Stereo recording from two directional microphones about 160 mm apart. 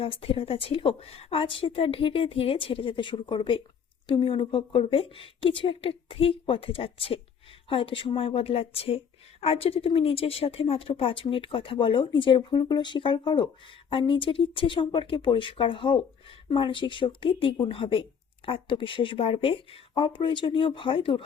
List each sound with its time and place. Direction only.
0.0 s speech: 35° left (ahead or behind)